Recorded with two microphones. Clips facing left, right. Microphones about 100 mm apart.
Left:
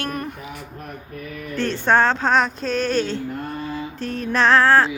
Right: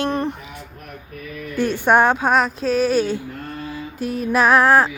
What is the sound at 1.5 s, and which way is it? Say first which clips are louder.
Speech: right 2 dB; 10° right (ahead or behind).